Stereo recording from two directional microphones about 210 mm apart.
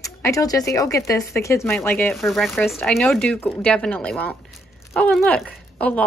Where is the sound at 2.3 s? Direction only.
Centre (ahead or behind).